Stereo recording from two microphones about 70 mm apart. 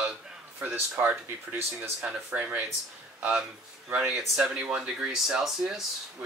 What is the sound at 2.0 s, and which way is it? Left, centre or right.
Speech, centre.